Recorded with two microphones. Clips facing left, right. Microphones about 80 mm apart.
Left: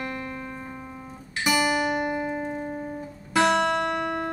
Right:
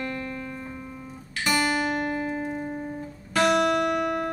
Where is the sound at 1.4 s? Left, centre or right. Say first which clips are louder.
Left 1 dB; centre.